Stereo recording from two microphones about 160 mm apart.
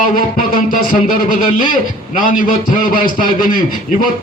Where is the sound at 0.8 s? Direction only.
60° left (ahead or behind).